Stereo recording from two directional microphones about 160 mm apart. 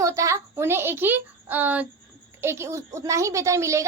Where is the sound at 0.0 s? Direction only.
20° right (ahead or behind).